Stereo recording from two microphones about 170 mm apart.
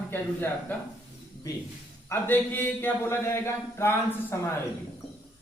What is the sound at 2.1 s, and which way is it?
A man's voice, 10° left (ahead or behind).